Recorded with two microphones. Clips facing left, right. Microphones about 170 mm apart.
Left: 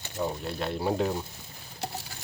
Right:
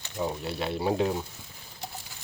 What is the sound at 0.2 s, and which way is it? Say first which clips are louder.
Speech: even; 5° right (ahead or behind).